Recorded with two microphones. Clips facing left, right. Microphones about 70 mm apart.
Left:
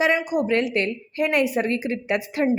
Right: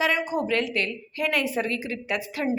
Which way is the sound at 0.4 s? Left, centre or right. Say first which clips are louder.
Left 4 dB; left.